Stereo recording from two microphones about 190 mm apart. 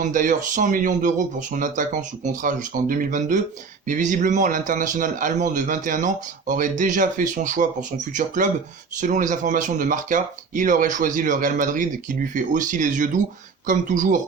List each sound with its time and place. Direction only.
0.0 s speech: 45° right (ahead or behind)